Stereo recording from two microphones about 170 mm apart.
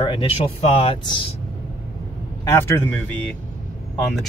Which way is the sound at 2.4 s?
15° left (ahead or behind).